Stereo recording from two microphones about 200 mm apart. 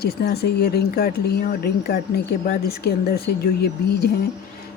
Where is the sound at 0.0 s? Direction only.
50° left (ahead or behind).